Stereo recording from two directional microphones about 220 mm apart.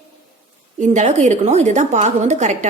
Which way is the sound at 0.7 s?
30° right (ahead or behind).